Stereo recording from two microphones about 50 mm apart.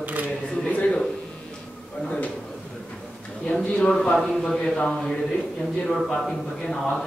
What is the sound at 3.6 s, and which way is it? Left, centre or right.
Speech, left.